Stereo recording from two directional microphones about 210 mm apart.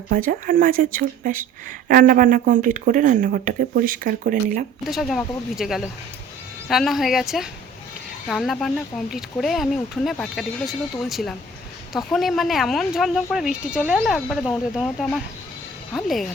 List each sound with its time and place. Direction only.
0.1 s speech: 40° right (ahead or behind)
4.8 s speech: centre (ahead or behind)